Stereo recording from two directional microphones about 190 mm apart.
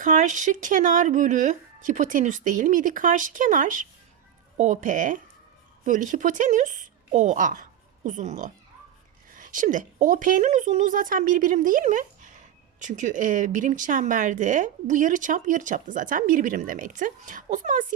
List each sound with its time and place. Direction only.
0.0 s speech: 40° right (ahead or behind)